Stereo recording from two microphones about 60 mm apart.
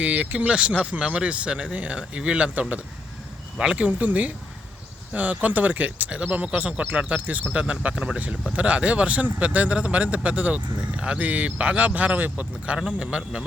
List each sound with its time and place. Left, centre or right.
0.0 s a man's voice: right
3.8 s a man's voice: right